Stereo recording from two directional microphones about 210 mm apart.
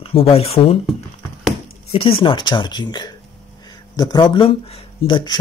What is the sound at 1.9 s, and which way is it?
Speech, 25° left (ahead or behind).